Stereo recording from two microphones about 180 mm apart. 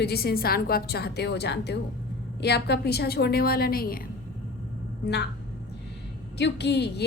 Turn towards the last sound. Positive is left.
turn(degrees=70)  # may be behind; listen again after turning